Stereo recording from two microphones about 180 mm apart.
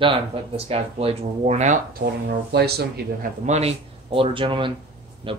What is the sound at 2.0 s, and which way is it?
Speech, 60° right (ahead or behind).